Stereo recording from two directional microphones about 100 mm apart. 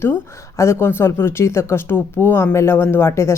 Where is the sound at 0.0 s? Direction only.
25° left (ahead or behind).